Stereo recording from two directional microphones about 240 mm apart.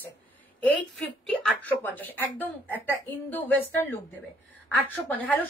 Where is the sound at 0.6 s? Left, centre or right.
Centre.